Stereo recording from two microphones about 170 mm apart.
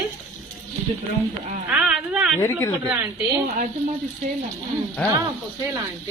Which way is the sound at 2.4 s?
15° left (ahead or behind).